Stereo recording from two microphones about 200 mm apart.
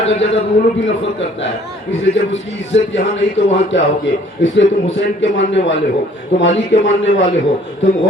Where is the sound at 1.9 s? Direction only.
70° left (ahead or behind).